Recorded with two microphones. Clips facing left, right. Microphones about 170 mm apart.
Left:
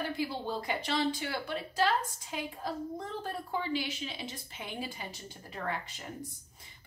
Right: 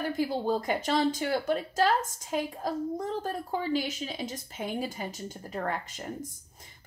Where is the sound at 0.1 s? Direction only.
45° right (ahead or behind).